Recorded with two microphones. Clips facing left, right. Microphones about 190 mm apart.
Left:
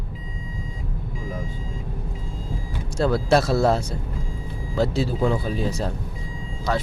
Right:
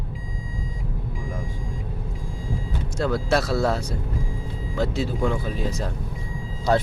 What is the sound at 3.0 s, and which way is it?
Speech, 30° left (ahead or behind).